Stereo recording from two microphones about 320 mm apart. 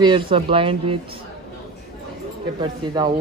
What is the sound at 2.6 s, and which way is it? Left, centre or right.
Speech, centre.